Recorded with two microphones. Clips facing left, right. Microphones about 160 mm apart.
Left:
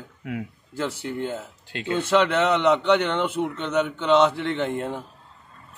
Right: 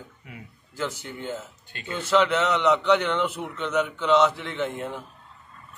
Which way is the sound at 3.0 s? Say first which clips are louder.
Left 2 dB; 30° left (ahead or behind).